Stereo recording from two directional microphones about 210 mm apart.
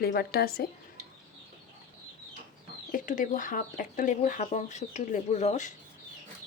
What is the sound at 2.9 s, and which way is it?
Speech, 40° left (ahead or behind).